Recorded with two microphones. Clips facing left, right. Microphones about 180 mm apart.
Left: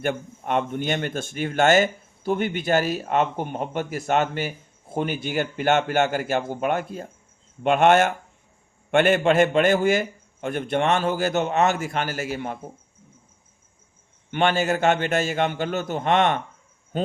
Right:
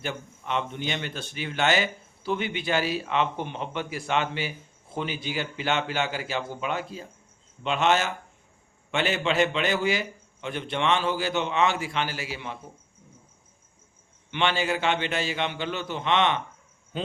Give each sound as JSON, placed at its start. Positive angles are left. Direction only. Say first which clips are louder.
{"t": 0.0, "sound": "speech", "louder": "left 7 dB", "side_deg": 50}
{"t": 14.3, "sound": "speech", "louder": "left 5 dB", "side_deg": 45}
{"t": 16.9, "sound": "insect", "louder": "left 7 dB", "side_deg": 45}